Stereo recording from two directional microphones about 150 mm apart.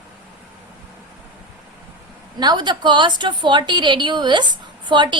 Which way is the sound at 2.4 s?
30° right (ahead or behind).